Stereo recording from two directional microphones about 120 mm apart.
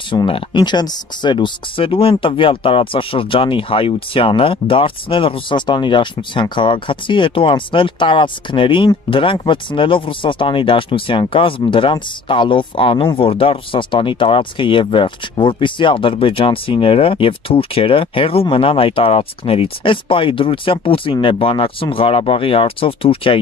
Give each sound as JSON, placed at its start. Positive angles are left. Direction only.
{"t": 0.1, "sound": "speech", "side_deg": 40}